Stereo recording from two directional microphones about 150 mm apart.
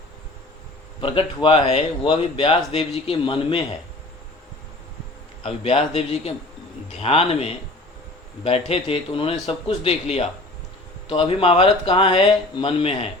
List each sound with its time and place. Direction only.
1.0 s speech: 35° left (ahead or behind)
5.4 s speech: 40° left (ahead or behind)